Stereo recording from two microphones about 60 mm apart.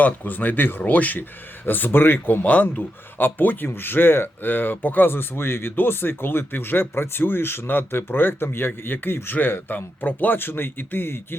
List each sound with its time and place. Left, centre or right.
0.0 s speech: left